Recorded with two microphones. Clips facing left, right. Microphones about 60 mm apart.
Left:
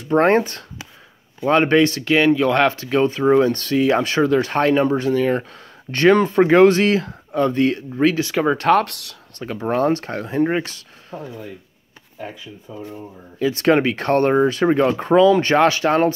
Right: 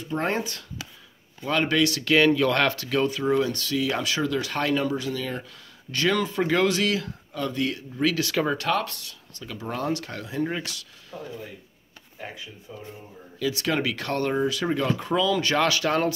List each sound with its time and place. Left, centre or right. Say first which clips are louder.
0.0 s speech: left 11 dB; left
1.4 s speech: left 8 dB; left
2.0 s speech: left 4 dB; centre
8.5 s speech: left 10 dB; left
8.8 s speech: left 1 dB; left
9.4 s speech: left 11 dB; left
13.4 s speech: left 9 dB; left